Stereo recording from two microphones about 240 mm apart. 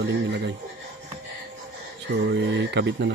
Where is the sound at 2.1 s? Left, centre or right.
Right.